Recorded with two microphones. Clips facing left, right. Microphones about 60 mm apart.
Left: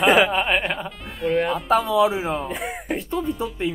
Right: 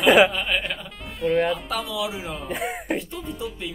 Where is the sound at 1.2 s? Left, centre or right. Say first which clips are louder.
Even; centre.